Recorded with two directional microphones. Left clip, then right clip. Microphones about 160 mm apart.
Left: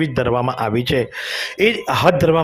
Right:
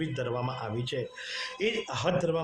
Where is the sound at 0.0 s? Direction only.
50° left (ahead or behind).